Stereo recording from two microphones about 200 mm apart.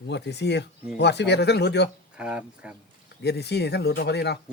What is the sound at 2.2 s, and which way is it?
Speech, 5° right (ahead or behind).